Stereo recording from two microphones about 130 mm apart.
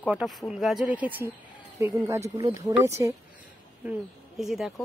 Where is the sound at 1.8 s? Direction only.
25° right (ahead or behind).